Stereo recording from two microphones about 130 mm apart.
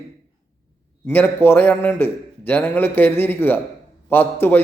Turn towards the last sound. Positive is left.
turn(degrees=15)  # may be behind; listen again after turning